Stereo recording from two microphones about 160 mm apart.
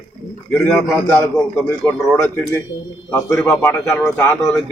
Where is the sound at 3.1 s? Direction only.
15° left (ahead or behind).